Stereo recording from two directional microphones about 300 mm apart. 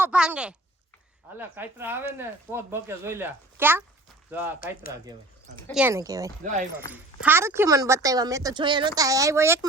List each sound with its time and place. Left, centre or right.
0.0 s speech: centre
5.6 s speech: centre
6.4 s speech: right
6.9 s speech: centre